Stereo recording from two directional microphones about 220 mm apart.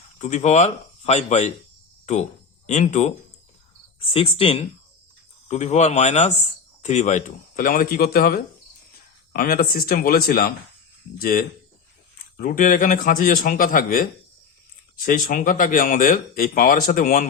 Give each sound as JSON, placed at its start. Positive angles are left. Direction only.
{"t": 0.2, "sound": "speech", "side_deg": 30}
{"t": 2.6, "sound": "speech", "side_deg": 30}